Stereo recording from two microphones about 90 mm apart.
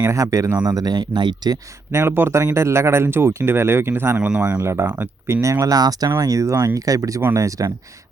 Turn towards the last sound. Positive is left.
turn(degrees=-40)  # may be behind; listen again after turning